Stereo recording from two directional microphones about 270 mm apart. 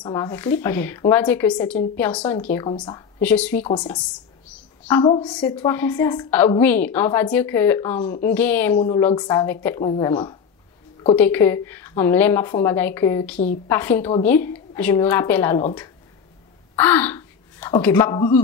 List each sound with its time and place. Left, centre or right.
0.0 s a woman's voice: centre
3.2 s a woman's voice: centre
4.8 s a woman's voice: centre
16.7 s speech: centre